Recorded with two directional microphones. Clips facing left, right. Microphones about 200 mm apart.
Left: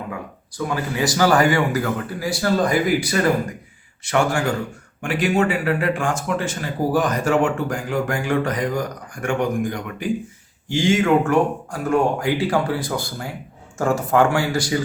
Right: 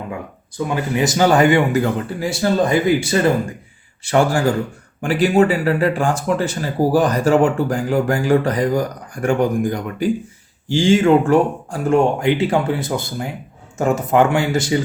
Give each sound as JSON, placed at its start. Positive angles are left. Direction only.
{"t": 0.7, "sound": "speech", "side_deg": -20}